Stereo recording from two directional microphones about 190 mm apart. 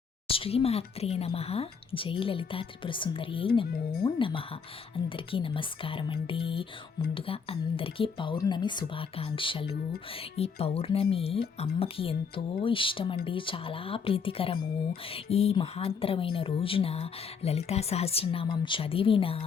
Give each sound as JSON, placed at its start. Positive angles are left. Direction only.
{"t": 0.3, "sound": "speech", "side_deg": 30}